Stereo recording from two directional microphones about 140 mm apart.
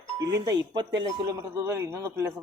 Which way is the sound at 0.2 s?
25° right (ahead or behind).